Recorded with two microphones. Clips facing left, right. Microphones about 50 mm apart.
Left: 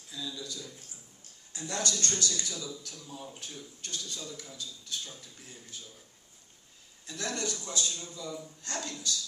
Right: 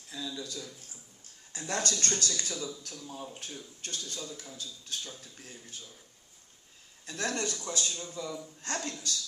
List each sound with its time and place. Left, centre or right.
0.1 s a man's voice: right
7.1 s a man's voice: right